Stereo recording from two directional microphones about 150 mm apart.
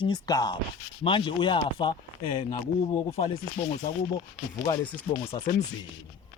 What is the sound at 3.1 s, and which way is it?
Speech, 40° left (ahead or behind).